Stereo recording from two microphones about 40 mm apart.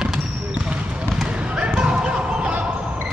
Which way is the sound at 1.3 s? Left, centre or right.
Right.